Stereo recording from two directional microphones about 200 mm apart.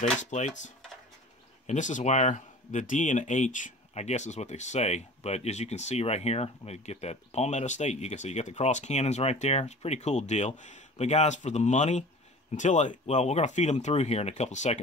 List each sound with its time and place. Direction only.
0.0 s speech: 35° left (ahead or behind)